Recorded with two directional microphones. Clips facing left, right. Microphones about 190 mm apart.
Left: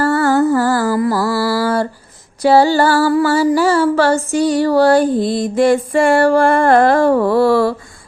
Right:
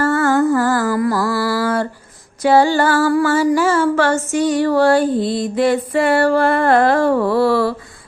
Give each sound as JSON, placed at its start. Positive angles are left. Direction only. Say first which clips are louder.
{"t": 0.0, "sound": "music", "louder": "left 2 dB", "side_deg": 35}
{"t": 3.1, "sound": "music", "louder": "left 1 dB", "side_deg": 25}
{"t": 3.3, "sound": "a sound", "louder": "left 2 dB", "side_deg": 35}